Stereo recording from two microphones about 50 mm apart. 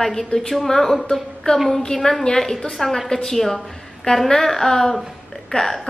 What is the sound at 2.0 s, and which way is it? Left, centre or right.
A woman's voice, centre.